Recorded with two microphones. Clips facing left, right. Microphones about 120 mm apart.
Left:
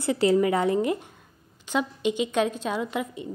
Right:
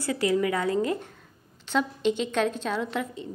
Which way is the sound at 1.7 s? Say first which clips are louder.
Even; 10° left (ahead or behind).